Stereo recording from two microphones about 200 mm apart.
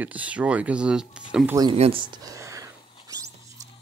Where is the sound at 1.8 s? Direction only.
25° right (ahead or behind).